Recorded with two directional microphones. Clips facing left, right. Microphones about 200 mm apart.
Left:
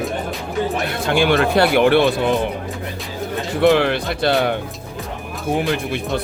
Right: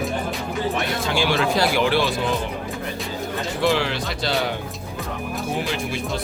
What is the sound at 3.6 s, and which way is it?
Speech, 55° left (ahead or behind).